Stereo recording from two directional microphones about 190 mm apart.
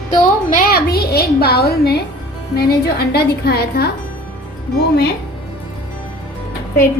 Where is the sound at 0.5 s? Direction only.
55° left (ahead or behind).